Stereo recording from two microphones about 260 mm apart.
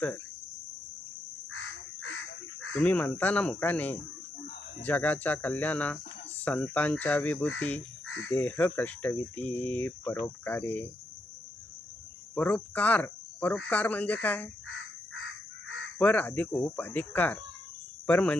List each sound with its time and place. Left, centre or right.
1.5 s crow: left
2.7 s speech: centre
8.0 s crow: left
8.3 s speech: centre
12.3 s speech: centre
16.0 s speech: centre